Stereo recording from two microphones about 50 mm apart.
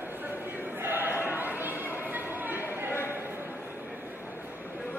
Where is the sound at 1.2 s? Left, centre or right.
Right.